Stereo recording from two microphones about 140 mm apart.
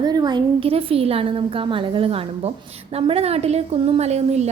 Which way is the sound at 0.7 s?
40° right (ahead or behind).